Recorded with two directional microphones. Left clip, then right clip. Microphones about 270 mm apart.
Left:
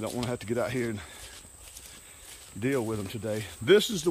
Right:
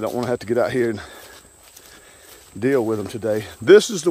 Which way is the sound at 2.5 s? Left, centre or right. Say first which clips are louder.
Right 10 dB; centre.